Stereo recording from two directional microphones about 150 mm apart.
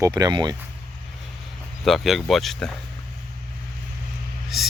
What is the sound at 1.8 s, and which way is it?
Speech, centre (ahead or behind).